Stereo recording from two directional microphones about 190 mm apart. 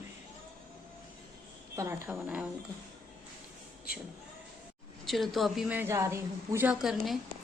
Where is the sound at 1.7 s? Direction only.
15° right (ahead or behind).